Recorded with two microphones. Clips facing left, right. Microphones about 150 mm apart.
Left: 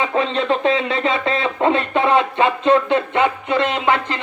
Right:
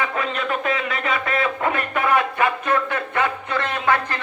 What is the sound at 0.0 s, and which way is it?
A man's voice, 25° left (ahead or behind).